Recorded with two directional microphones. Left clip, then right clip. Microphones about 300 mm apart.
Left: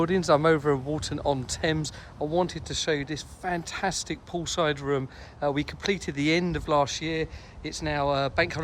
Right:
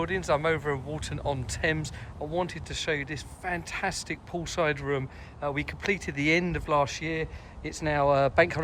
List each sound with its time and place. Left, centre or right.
0.0 s speech: centre